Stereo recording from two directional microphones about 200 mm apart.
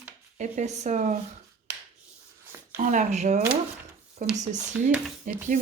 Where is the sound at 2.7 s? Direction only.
40° right (ahead or behind).